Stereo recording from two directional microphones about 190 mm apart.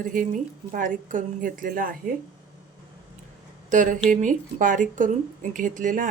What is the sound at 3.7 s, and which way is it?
Speech, 45° right (ahead or behind).